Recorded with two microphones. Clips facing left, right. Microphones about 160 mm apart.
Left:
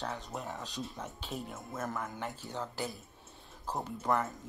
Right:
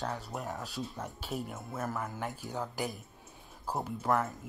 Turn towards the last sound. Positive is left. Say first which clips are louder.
# right 1 dB
turn(degrees=0)  # may be behind; listen again after turning